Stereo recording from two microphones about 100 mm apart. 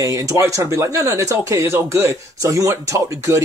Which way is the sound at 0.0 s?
35° right (ahead or behind).